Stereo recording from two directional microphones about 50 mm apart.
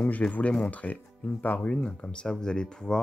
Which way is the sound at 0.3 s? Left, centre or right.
Left.